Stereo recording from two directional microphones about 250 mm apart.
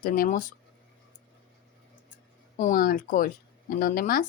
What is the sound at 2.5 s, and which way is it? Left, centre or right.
Speech, left.